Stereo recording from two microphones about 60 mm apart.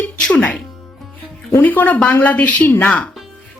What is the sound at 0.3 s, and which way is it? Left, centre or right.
Speech, centre.